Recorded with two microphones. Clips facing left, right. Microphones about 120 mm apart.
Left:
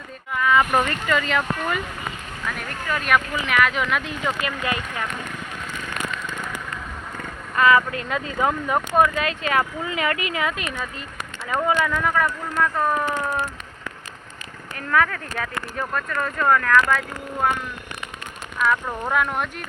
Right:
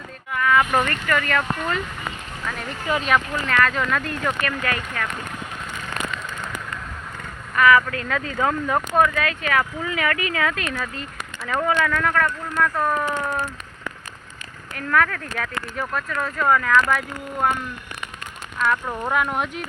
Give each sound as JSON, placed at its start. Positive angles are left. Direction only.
{"t": 0.3, "sound": "a sound", "side_deg": 15}
{"t": 0.6, "sound": "speech", "side_deg": 10}
{"t": 3.1, "sound": "speech", "side_deg": 10}
{"t": 7.5, "sound": "speech", "side_deg": 25}
{"t": 14.7, "sound": "speech", "side_deg": 0}
{"t": 18.6, "sound": "speech", "side_deg": 0}